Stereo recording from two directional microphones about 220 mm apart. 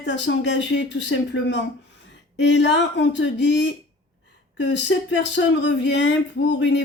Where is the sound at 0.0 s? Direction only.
55° left (ahead or behind).